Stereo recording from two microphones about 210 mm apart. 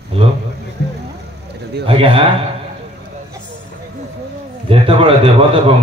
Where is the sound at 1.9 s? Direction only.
25° right (ahead or behind).